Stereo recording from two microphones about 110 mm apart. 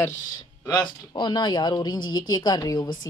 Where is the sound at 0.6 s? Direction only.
40° left (ahead or behind).